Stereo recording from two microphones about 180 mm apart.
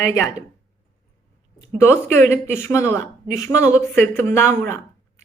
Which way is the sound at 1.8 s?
10° left (ahead or behind).